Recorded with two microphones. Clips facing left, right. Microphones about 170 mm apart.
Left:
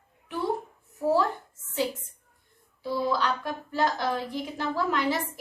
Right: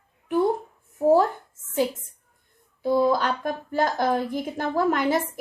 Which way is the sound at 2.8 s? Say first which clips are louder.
Right 6 dB; 50° right (ahead or behind).